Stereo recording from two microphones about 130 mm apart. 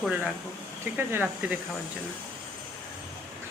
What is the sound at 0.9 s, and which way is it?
Speech, 15° right (ahead or behind).